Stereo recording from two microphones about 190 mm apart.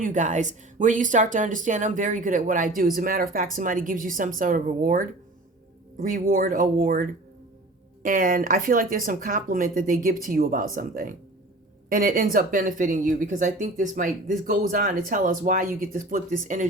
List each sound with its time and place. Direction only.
0.0 s speech: 40° right (ahead or behind)